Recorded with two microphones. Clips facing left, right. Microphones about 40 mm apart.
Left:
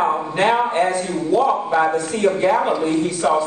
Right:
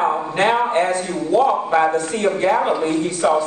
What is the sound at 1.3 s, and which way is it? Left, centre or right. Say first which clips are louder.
Speech: right 1 dB; centre.